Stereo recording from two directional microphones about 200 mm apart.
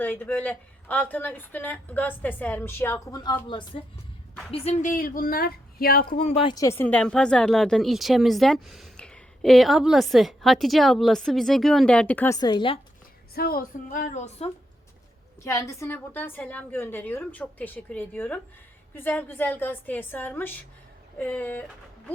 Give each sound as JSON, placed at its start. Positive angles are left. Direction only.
{"t": 0.0, "sound": "a woman's voice", "side_deg": 10}
{"t": 4.5, "sound": "speech", "side_deg": 35}
{"t": 13.3, "sound": "a woman's voice", "side_deg": 50}
{"t": 15.4, "sound": "a woman's voice", "side_deg": 15}